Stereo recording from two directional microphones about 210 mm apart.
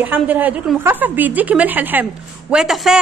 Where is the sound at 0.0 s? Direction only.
10° right (ahead or behind).